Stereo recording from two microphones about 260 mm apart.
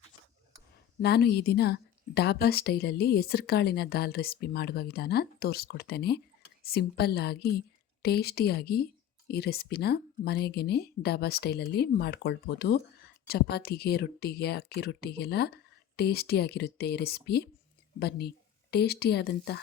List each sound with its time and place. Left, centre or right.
0.9 s a woman's voice: left